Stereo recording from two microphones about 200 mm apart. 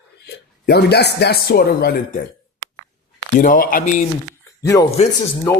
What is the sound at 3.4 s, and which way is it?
Speech, 45° left (ahead or behind).